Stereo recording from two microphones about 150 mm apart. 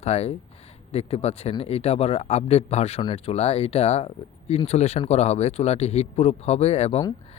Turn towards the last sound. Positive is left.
turn(degrees=45)  # may be behind; listen again after turning